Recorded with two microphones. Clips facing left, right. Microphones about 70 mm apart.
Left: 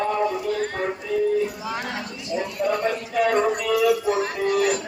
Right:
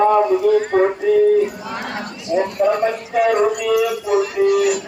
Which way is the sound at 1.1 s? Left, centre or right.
Right.